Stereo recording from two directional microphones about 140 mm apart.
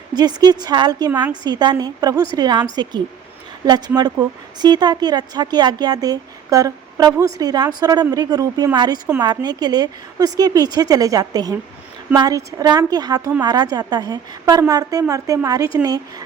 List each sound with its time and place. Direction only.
0.1 s speech: 30° right (ahead or behind)
3.7 s speech: 30° right (ahead or behind)